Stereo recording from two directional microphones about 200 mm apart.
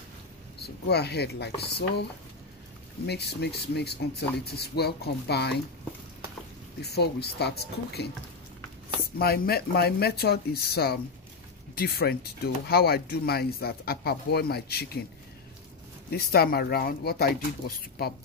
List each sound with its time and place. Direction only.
0.6 s speech: 55° left (ahead or behind)
3.1 s speech: 55° left (ahead or behind)
6.8 s speech: 55° left (ahead or behind)
9.2 s speech: 50° left (ahead or behind)
16.1 s speech: 50° left (ahead or behind)